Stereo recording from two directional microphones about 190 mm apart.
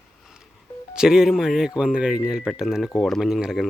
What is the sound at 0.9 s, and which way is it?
Speech, 5° right (ahead or behind).